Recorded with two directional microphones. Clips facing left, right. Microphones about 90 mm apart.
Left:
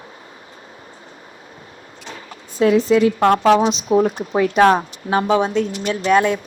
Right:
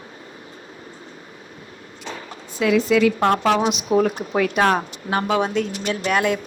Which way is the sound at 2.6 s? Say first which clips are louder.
Left 3 dB; 35° left (ahead or behind).